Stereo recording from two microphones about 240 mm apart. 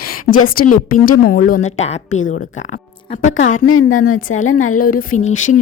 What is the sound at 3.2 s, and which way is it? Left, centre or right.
A woman's voice, left.